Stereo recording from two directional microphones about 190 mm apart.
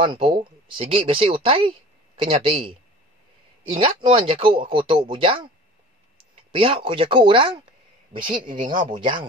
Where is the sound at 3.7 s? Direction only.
30° right (ahead or behind).